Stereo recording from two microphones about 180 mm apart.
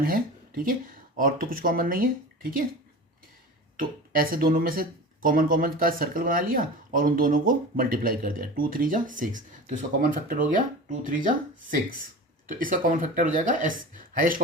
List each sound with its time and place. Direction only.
0.0 s speech: 55° right (ahead or behind)
3.8 s speech: 50° right (ahead or behind)
12.5 s speech: 50° right (ahead or behind)